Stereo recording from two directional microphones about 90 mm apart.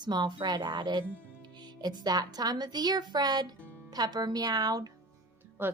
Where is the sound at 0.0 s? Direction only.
50° right (ahead or behind).